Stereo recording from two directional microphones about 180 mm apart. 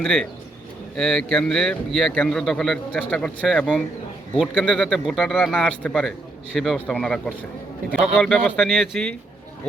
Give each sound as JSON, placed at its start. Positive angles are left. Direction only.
{"t": 0.0, "sound": "speech", "side_deg": 5}